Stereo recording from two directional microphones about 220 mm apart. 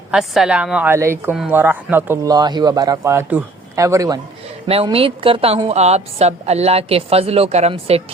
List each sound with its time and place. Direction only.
0.1 s a woman's voice: 5° right (ahead or behind)
4.7 s a woman's voice: 25° right (ahead or behind)